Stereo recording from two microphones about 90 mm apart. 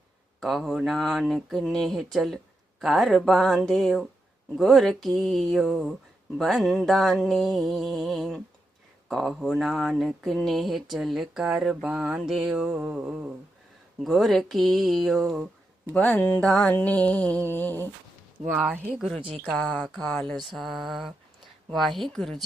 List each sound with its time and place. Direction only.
0.3 s speech: centre (ahead or behind)
11.9 s mantra: 10° right (ahead or behind)
14.0 s speech: centre (ahead or behind)
16.0 s mantra: 15° left (ahead or behind)
17.5 s humming: 20° left (ahead or behind)
18.6 s mantra: 15° right (ahead or behind)
18.9 s speech: centre (ahead or behind)
19.5 s mantra: 15° left (ahead or behind)
20.3 s speech: centre (ahead or behind)